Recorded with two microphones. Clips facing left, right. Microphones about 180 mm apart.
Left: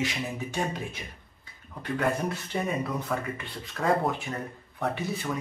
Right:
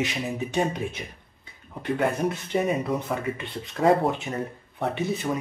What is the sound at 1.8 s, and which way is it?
Speech, 20° right (ahead or behind).